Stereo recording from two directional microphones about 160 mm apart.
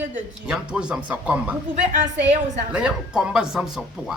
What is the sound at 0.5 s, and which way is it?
Speech, 5° right (ahead or behind).